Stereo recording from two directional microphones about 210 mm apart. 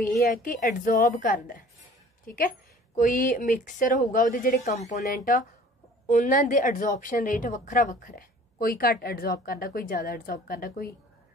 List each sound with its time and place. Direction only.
0.2 s a woman's voice: 40° left (ahead or behind)
4.9 s a woman's voice: 45° left (ahead or behind)